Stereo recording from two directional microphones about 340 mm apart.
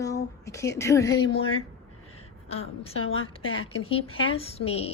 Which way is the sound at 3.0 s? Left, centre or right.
Left.